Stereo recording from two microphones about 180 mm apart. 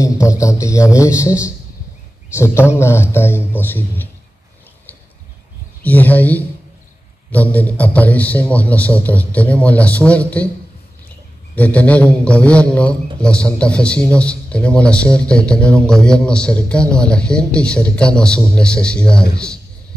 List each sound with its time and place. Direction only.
0.0 s a man's voice: 15° left (ahead or behind)
2.3 s a man's voice: 15° left (ahead or behind)
5.8 s a man's voice: 10° left (ahead or behind)
11.5 s a man's voice: 10° left (ahead or behind)